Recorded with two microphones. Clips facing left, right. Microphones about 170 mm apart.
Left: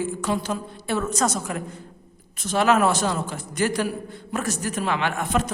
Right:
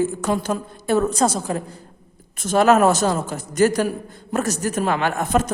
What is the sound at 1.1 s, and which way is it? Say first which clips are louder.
Speech: right 4 dB; 30° right (ahead or behind).